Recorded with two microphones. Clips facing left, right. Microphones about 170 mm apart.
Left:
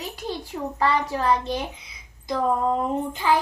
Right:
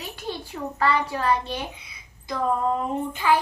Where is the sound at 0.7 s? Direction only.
15° left (ahead or behind).